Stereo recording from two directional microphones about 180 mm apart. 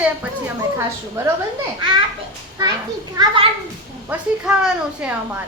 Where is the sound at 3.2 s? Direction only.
20° right (ahead or behind).